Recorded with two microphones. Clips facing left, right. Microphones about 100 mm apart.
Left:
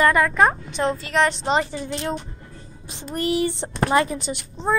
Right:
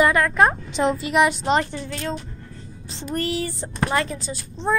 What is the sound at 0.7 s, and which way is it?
A woman's voice, 15° right (ahead or behind).